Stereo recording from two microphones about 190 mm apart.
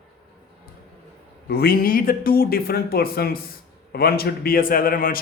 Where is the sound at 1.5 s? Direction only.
50° left (ahead or behind).